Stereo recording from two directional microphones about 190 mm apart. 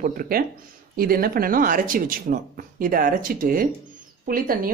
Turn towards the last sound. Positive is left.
turn(degrees=-50)  # may be behind; listen again after turning